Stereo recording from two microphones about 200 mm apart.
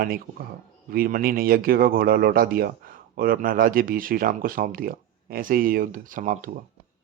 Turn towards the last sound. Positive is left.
turn(degrees=-40)  # may be behind; listen again after turning